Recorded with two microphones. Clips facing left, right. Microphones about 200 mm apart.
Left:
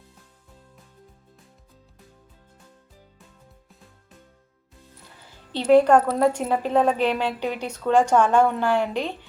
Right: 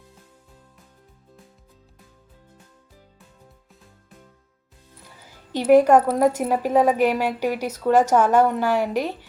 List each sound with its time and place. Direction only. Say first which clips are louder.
5.5 s a woman's voice: right 1 dB; 10° right (ahead or behind)